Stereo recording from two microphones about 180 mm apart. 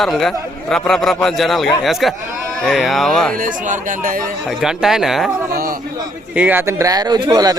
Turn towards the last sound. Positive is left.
turn(degrees=-20)  # may be behind; listen again after turning